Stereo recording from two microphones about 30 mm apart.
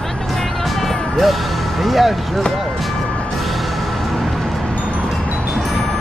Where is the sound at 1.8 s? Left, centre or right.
Centre.